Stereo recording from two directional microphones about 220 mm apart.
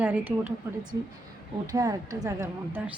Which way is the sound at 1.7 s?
15° right (ahead or behind).